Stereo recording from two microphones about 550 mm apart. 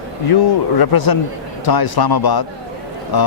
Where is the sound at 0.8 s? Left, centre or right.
Left.